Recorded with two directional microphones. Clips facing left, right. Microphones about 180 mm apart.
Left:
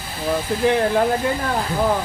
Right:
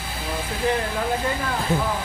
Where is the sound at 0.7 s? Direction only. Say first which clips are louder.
Left 7 dB; 60° left (ahead or behind).